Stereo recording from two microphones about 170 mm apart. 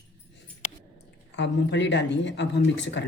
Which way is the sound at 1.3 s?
90° left.